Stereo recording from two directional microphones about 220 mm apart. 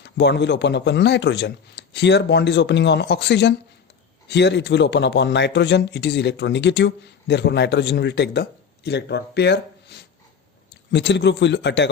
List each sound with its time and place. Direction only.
0.0 s speech: 50° left (ahead or behind)